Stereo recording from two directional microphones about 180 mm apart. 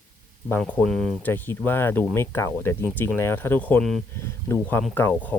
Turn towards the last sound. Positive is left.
turn(degrees=10)  # may be behind; listen again after turning